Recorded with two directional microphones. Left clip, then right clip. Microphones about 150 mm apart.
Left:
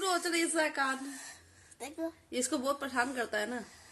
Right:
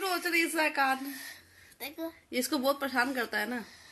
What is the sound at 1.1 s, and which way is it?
Speech, 20° left (ahead or behind).